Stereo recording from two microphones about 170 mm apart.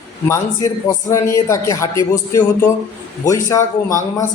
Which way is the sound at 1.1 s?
20° left (ahead or behind).